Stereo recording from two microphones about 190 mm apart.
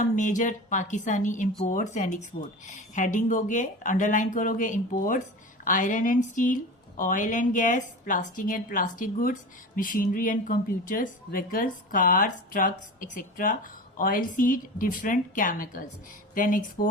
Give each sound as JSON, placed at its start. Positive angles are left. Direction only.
{"t": 0.0, "sound": "a woman's voice", "side_deg": 40}